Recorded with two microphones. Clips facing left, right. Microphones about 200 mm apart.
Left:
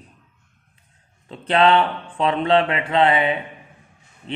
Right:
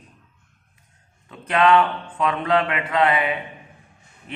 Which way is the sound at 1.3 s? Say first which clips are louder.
Left 1 dB; 30° left (ahead or behind).